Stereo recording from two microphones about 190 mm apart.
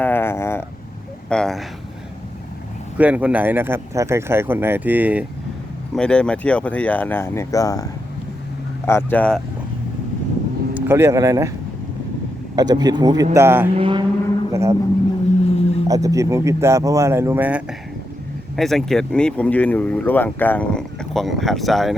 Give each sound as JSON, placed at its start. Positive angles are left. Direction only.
{"t": 0.0, "sound": "a sound", "side_deg": 10}
{"t": 1.3, "sound": "speech", "side_deg": 5}
{"t": 3.0, "sound": "speech", "side_deg": -5}
{"t": 5.9, "sound": "speech", "side_deg": 5}
{"t": 8.9, "sound": "speech", "side_deg": 10}
{"t": 10.8, "sound": "speech", "side_deg": -15}
{"t": 12.5, "sound": "speech", "side_deg": -20}
{"t": 13.7, "sound": "speech", "side_deg": -25}
{"t": 14.5, "sound": "speech", "side_deg": -15}
{"t": 15.4, "sound": "a sound", "side_deg": 30}
{"t": 15.9, "sound": "speech", "side_deg": -15}